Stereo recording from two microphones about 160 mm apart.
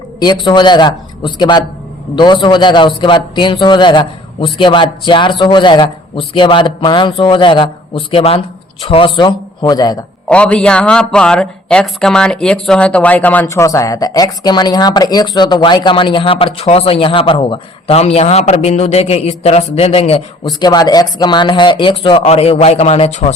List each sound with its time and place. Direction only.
0.2 s a man's voice: 30° left (ahead or behind)
10.2 s a man's voice: 5° left (ahead or behind); by 20.2 s 40° left (ahead or behind)
20.4 s speech: 25° left (ahead or behind); by 23.3 s 40° left (ahead or behind)